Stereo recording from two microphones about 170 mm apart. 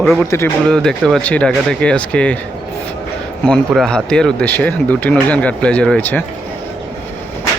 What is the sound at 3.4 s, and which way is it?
Speech, centre (ahead or behind).